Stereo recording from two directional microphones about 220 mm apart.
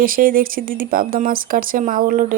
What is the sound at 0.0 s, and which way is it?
Speech, 40° right (ahead or behind).